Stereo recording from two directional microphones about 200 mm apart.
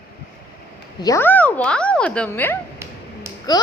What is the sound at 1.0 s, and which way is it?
A child's voice, 15° left (ahead or behind).